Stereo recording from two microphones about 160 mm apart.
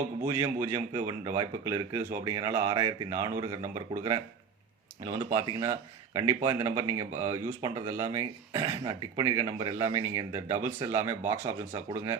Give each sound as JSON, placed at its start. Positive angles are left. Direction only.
{"t": 0.3, "sound": "speech", "side_deg": -20}